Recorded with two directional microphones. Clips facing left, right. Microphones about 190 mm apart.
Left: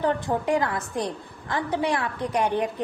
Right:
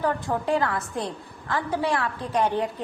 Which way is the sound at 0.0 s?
20° left (ahead or behind).